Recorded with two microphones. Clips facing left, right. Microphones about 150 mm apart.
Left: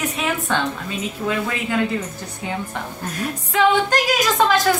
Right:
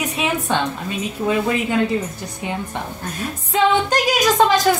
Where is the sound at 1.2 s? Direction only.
10° right (ahead or behind).